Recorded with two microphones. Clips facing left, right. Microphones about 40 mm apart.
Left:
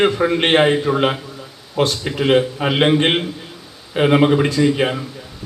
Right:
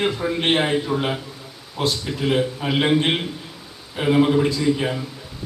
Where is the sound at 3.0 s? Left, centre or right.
Left.